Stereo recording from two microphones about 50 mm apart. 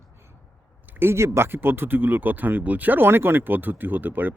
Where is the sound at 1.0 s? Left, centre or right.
Right.